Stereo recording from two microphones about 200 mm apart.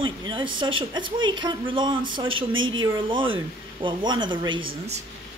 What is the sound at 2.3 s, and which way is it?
Speech, 80° right.